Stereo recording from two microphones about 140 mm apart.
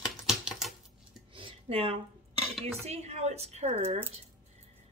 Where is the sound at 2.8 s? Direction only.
50° right (ahead or behind).